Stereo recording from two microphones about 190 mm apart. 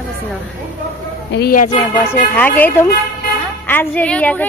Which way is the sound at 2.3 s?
10° left (ahead or behind).